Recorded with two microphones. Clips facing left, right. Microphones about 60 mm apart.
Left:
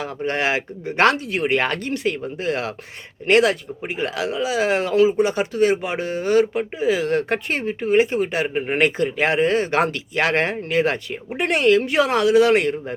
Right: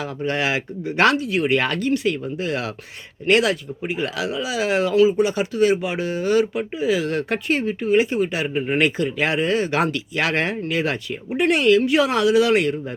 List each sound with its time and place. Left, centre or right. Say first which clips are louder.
0.0 s speech: left 1 dB; left